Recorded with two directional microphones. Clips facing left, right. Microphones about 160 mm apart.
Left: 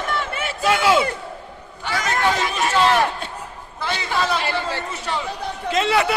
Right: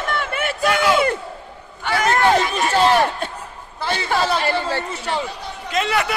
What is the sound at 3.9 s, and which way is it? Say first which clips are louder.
Chatter: right 3 dB; 45° right (ahead or behind).